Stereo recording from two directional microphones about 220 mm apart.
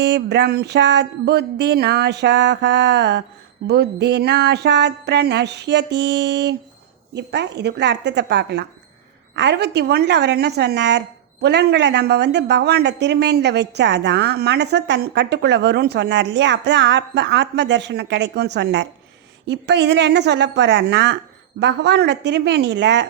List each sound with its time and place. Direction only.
0.0 s a woman's voice: 50° right (ahead or behind)